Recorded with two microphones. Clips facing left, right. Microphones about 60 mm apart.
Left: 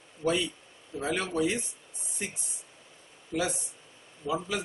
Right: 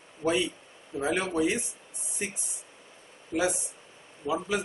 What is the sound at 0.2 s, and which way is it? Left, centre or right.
Speech, centre.